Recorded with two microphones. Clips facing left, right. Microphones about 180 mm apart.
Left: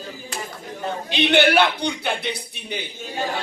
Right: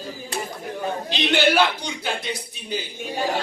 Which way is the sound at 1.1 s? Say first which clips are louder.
Left 3 dB; 60° left (ahead or behind).